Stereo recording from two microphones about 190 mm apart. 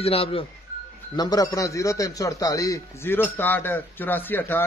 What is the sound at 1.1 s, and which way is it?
A man's voice, 20° left (ahead or behind).